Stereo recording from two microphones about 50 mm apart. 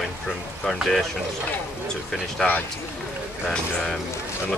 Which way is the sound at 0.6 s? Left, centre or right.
Centre.